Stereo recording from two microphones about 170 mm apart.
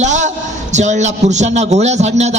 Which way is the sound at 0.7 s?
45° right (ahead or behind).